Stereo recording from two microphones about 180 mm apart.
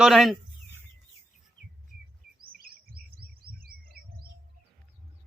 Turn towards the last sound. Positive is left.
turn(degrees=-55)  # may be behind; listen again after turning